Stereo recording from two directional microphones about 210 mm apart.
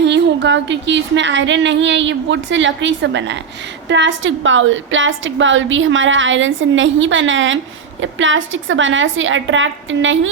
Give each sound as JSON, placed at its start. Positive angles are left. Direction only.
{"t": 0.0, "sound": "a woman's voice", "side_deg": -55}